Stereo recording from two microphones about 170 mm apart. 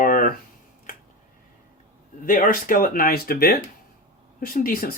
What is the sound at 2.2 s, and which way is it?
Speech, 55° left (ahead or behind).